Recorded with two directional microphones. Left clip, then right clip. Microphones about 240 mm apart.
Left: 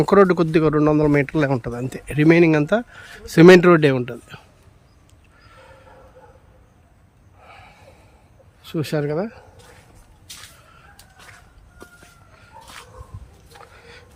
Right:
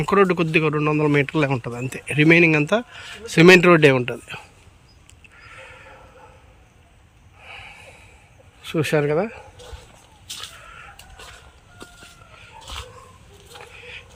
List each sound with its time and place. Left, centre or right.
0.0 s a man's voice: centre
5.4 s a sound: centre
7.4 s snort: centre
8.6 s a man's voice: centre